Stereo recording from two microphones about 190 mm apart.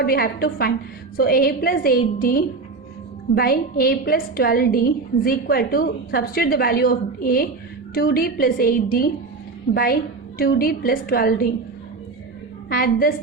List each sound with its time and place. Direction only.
0.0 s a woman's voice: 50° left (ahead or behind)
12.6 s a woman's voice: 50° left (ahead or behind)